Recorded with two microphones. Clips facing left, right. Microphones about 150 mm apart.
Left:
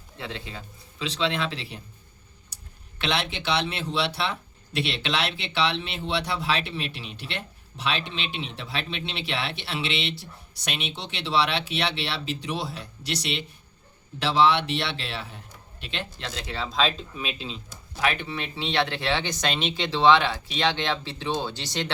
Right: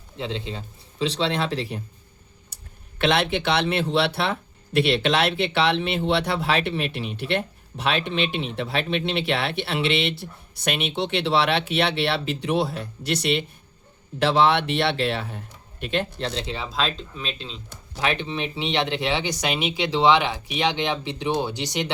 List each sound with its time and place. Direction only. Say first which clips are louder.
0.2 s a man's voice: right 6 dB; 20° right (ahead or behind)
0.9 s speech: right 4 dB; 35° right (ahead or behind)
2.5 s a sound: right 1 dB; 55° right (ahead or behind)
3.0 s speech: right 7 dB; 55° right (ahead or behind)
16.1 s speech: right 7 dB; 30° right (ahead or behind)
16.7 s speech: left 3 dB; centre (ahead or behind)
18.0 s speech: right 2 dB; 25° right (ahead or behind)